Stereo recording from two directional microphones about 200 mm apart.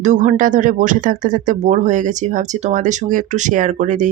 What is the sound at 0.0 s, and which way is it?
Speech, 35° right (ahead or behind).